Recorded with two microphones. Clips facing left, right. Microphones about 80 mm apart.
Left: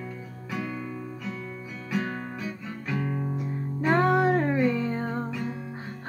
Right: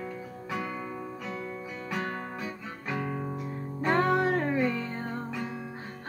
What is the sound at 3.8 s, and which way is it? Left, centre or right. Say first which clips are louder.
Music: left 3 dB; centre.